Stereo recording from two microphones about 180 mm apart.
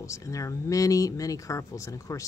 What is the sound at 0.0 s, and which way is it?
Speech, 15° left (ahead or behind).